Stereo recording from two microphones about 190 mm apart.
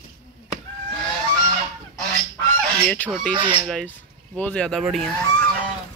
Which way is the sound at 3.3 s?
25° right (ahead or behind).